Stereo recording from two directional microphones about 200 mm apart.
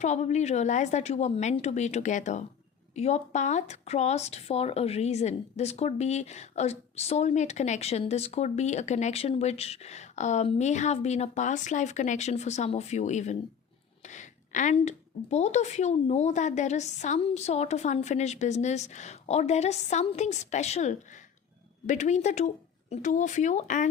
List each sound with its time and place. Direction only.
0.0 s speech: 35° left (ahead or behind)